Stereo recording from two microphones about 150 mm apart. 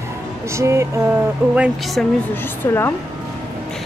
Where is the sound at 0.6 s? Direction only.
20° right (ahead or behind).